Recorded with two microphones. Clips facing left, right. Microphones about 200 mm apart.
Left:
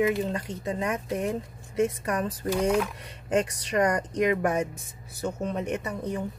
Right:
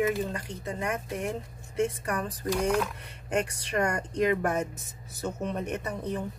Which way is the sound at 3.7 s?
20° left (ahead or behind).